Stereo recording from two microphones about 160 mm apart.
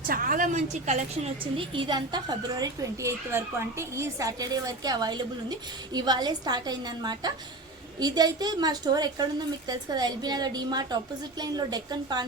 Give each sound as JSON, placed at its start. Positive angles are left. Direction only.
{"t": 0.1, "sound": "a woman's voice", "side_deg": -60}
{"t": 1.5, "sound": "a woman's voice", "side_deg": -30}